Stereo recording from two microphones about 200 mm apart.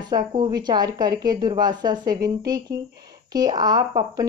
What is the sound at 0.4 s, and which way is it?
A woman's voice, 20° right (ahead or behind).